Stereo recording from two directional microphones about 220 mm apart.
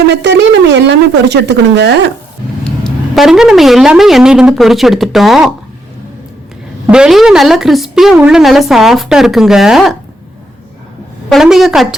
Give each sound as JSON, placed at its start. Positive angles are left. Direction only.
{"t": 0.1, "sound": "speech", "side_deg": -50}
{"t": 2.6, "sound": "a woman's voice", "side_deg": 0}
{"t": 6.8, "sound": "a woman's voice", "side_deg": -5}
{"t": 11.3, "sound": "a woman's voice", "side_deg": 0}